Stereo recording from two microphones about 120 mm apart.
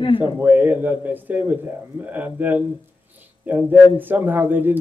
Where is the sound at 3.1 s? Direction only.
15° right (ahead or behind).